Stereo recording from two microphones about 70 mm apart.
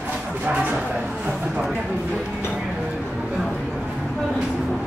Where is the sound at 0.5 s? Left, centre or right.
Right.